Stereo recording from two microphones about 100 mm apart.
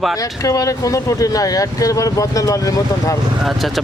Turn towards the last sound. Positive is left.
turn(degrees=0)  # may be behind; listen again after turning